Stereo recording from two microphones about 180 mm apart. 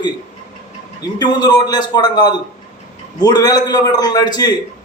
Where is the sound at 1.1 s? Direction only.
20° left (ahead or behind).